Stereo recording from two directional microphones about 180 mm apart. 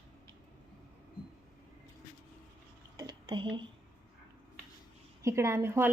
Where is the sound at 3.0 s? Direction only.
25° right (ahead or behind).